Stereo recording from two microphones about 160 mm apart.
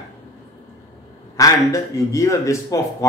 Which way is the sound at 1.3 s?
20° left (ahead or behind).